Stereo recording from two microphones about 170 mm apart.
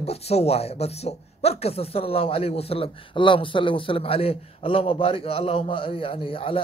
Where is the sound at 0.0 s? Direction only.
40° left (ahead or behind).